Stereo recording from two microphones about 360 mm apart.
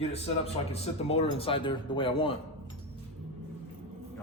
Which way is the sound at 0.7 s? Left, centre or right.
Centre.